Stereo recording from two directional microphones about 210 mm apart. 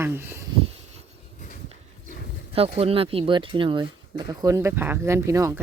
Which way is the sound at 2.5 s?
25° right (ahead or behind).